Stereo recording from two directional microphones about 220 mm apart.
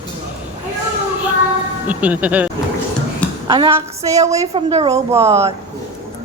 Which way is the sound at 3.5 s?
20° right (ahead or behind).